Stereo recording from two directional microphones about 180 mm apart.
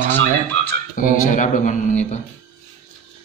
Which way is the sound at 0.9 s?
50° left (ahead or behind).